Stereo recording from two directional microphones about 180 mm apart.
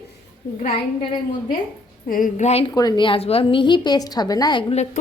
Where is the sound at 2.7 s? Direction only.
20° left (ahead or behind).